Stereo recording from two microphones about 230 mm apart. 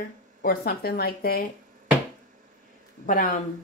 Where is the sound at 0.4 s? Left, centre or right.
Left.